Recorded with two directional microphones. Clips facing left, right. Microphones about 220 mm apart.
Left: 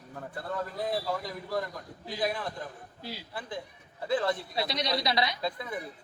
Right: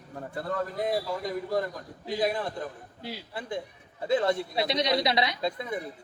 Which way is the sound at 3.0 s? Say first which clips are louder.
Right 3 dB; 25° right (ahead or behind).